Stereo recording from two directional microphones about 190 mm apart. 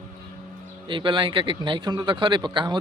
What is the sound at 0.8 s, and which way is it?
Speech, 25° right (ahead or behind).